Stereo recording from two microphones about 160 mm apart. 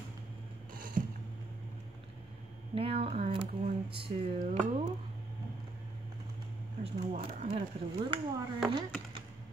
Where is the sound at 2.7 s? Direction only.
35° right (ahead or behind).